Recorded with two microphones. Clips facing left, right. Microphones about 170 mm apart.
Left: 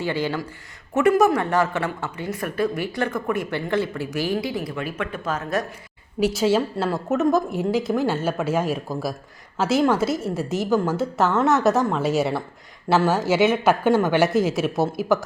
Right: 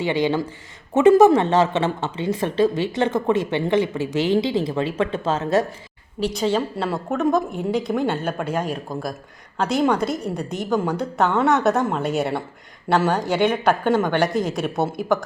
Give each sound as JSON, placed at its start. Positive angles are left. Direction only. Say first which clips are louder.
{"t": 0.0, "sound": "speech", "louder": "right 4 dB", "side_deg": -20}
{"t": 6.1, "sound": "speech", "louder": "left 2 dB", "side_deg": 5}